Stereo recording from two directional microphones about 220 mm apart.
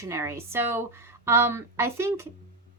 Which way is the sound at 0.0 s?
10° right (ahead or behind).